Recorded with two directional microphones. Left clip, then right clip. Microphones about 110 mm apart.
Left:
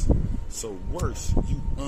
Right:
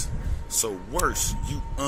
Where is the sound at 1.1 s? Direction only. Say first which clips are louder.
Right 2 dB; 5° left (ahead or behind).